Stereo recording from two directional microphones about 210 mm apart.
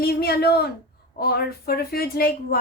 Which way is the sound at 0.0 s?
50° left (ahead or behind).